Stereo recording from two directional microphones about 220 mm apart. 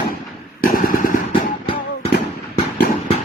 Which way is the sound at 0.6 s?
40° left (ahead or behind).